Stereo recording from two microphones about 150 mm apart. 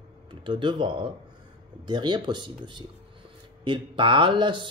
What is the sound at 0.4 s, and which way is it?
Speech, 30° right (ahead or behind).